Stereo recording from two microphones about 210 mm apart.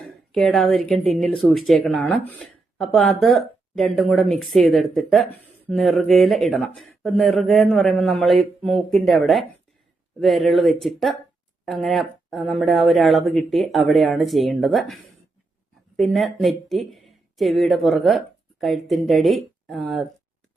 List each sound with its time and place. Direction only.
0.3 s speech: centre (ahead or behind)